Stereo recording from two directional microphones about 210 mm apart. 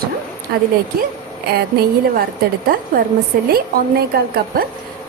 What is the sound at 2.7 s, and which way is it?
A woman's voice, 45° right (ahead or behind).